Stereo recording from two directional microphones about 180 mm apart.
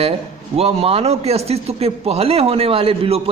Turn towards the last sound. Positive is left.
turn(degrees=-30)  # may be behind; listen again after turning